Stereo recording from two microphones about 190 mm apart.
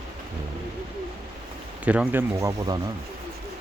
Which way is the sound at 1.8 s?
5° right (ahead or behind).